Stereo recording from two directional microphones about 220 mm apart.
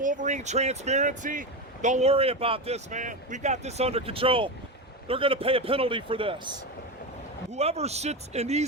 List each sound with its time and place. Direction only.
0.0 s a man's voice: 35° right (ahead or behind)
7.5 s a man's voice: 30° right (ahead or behind)